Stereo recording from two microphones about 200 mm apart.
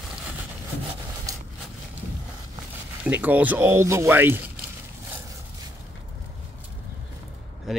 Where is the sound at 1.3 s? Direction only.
15° right (ahead or behind).